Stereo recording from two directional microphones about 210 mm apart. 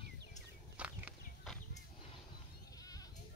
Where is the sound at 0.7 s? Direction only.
5° right (ahead or behind).